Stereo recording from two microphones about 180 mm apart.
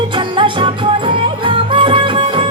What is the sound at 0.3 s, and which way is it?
Music, 30° right (ahead or behind).